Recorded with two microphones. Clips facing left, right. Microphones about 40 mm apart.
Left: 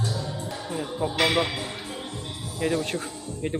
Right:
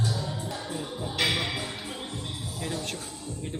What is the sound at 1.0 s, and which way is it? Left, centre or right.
Music, left.